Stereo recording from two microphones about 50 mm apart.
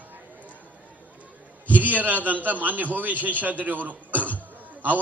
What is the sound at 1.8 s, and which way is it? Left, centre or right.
A man's voice, right.